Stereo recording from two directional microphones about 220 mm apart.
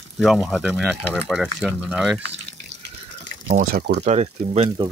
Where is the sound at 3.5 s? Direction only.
45° right (ahead or behind).